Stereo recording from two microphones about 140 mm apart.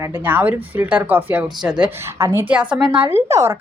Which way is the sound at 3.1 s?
20° right (ahead or behind).